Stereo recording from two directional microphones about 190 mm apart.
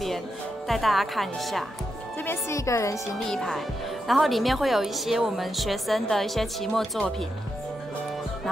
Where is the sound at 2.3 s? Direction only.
15° left (ahead or behind).